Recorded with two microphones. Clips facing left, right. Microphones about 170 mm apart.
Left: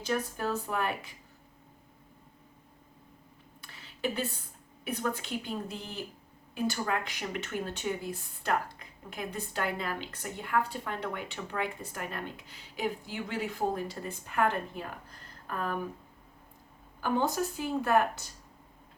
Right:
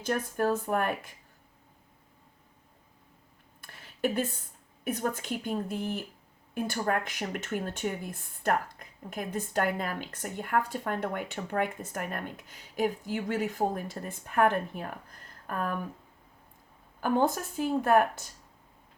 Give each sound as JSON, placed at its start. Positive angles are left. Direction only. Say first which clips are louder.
{"t": 0.0, "sound": "speech", "louder": "right 3 dB", "side_deg": -50}
{"t": 3.6, "sound": "a sound", "louder": "right 4 dB", "side_deg": -50}
{"t": 4.8, "sound": "speech", "louder": "right 2 dB", "side_deg": -45}
{"t": 17.0, "sound": "speech", "louder": "right 2 dB", "side_deg": -50}